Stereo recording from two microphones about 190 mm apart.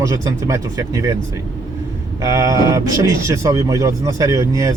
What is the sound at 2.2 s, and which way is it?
Speech, 15° right (ahead or behind).